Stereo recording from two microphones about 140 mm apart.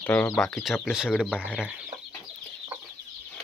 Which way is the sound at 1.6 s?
5° right (ahead or behind).